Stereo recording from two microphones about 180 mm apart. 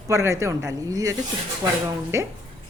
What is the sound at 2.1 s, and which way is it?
Speech, 15° right (ahead or behind).